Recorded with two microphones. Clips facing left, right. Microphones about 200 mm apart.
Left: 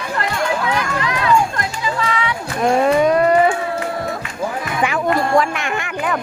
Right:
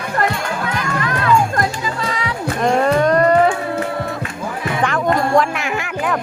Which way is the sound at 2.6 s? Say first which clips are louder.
Left 1 dB; 5° left (ahead or behind).